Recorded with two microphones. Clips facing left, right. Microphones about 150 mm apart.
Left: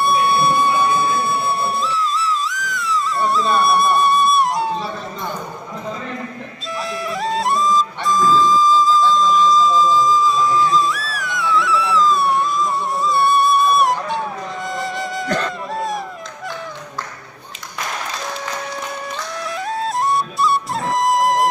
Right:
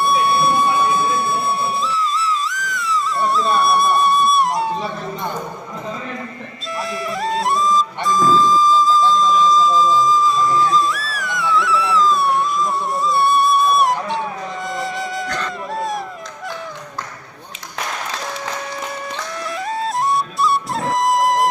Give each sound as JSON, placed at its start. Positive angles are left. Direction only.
{"t": 0.0, "sound": "music", "side_deg": 0}
{"t": 6.7, "sound": "music", "side_deg": 0}
{"t": 19.8, "sound": "music", "side_deg": 0}